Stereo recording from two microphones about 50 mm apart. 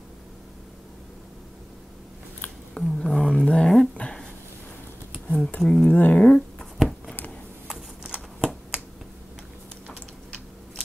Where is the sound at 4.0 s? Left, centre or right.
Left.